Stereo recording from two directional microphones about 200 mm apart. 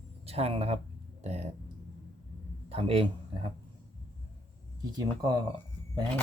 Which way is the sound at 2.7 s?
30° right (ahead or behind).